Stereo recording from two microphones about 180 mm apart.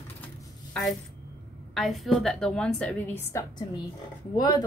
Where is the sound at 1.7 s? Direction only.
Centre (ahead or behind); by 4.7 s 20° left (ahead or behind).